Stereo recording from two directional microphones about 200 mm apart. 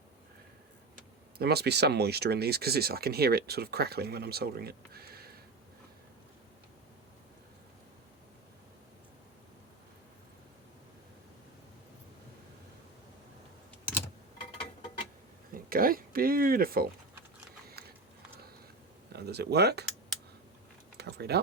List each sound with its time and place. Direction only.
1.4 s speech: 55° right (ahead or behind)
15.5 s speech: 45° right (ahead or behind)
17.7 s a sound: 50° right (ahead or behind)
19.1 s speech: 55° right (ahead or behind)
21.0 s speech: 55° right (ahead or behind)